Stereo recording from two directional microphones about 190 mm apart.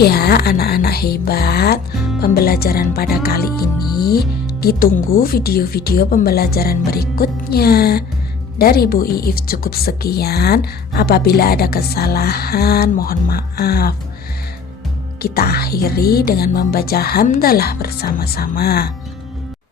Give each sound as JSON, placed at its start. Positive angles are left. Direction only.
{"t": 0.0, "sound": "speech", "side_deg": 55}
{"t": 15.2, "sound": "speech", "side_deg": 55}